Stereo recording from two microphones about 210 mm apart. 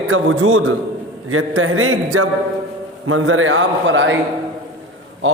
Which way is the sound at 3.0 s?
75° right (ahead or behind).